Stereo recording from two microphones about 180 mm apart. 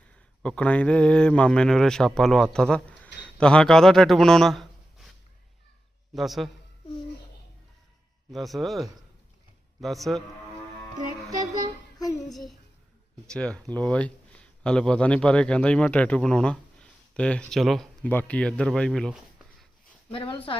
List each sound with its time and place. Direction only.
0.4 s a man's voice: 5° left (ahead or behind)
6.1 s speech: centre (ahead or behind)
8.3 s speech: centre (ahead or behind)
12.3 s speech: centre (ahead or behind)
20.1 s speech: 25° left (ahead or behind)